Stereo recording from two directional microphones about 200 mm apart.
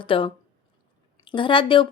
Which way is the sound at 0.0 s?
25° left (ahead or behind).